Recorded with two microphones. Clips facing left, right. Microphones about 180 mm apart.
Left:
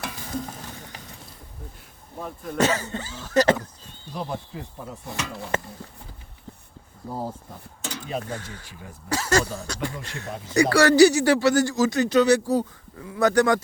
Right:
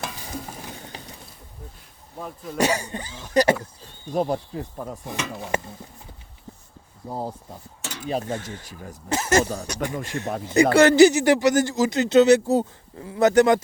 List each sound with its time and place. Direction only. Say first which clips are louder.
2.6 s cough: even; 15° right (ahead or behind)
4.0 s speech: right 8 dB; 50° right (ahead or behind)
5.1 s cough: right 1 dB; 15° right (ahead or behind)
7.0 s speech: right 1 dB; 20° right (ahead or behind)